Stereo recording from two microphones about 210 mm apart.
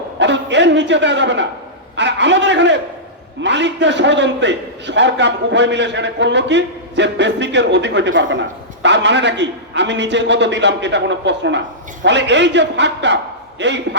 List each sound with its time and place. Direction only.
0.2 s a man's voice: 55° right (ahead or behind)